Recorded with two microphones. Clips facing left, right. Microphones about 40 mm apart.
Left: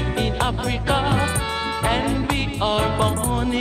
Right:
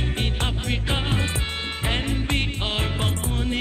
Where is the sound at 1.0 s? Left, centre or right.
Centre.